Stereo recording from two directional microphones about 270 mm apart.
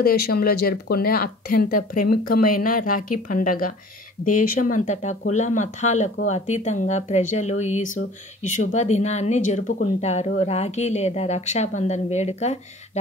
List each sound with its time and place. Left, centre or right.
0.0 s speech: left